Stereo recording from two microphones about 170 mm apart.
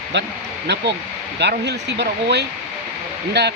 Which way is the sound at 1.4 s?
85° right.